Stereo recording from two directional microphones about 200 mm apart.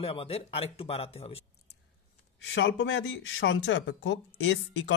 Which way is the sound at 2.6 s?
65° left (ahead or behind).